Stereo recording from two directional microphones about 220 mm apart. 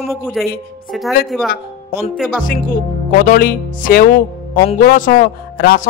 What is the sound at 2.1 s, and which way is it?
Music, centre (ahead or behind).